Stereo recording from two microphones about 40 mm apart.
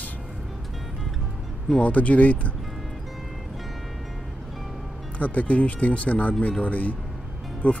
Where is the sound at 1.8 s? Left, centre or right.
Left.